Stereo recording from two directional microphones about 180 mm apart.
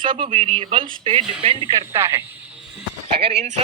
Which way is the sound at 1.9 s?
15° right (ahead or behind).